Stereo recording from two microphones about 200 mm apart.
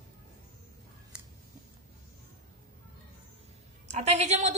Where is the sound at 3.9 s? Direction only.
35° right (ahead or behind).